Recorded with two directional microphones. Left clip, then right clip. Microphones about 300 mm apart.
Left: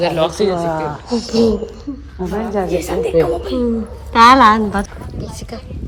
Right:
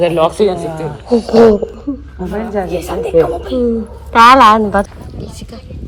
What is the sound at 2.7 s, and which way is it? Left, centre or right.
Speech, left.